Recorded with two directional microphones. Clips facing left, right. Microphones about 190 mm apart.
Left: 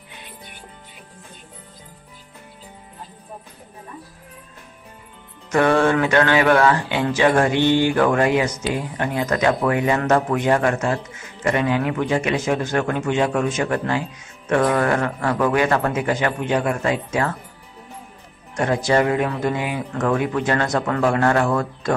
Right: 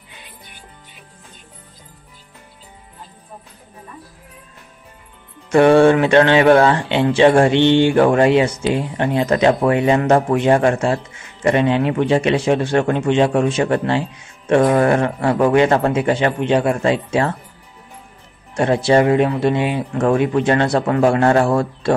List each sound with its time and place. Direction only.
5.5 s speech: 30° right (ahead or behind)
18.6 s speech: 25° right (ahead or behind)